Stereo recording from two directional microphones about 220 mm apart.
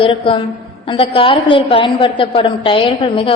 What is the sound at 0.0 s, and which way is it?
A woman's voice, 25° left (ahead or behind).